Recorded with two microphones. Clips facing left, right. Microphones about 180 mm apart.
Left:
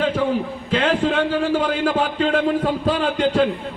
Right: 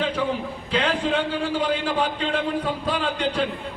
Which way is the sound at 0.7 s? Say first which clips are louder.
Left 4 dB; 45° left (ahead or behind).